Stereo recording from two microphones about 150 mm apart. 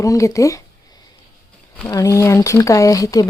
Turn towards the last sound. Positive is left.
turn(degrees=25)  # may be behind; listen again after turning